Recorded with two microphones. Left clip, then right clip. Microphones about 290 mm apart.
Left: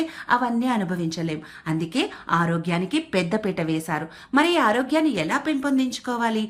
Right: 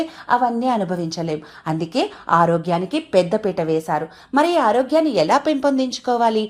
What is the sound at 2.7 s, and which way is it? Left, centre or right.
Speech, centre.